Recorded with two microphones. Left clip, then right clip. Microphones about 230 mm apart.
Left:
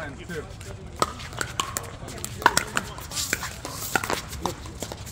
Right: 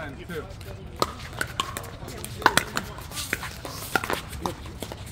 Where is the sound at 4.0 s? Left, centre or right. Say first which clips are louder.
Left 1 dB; left.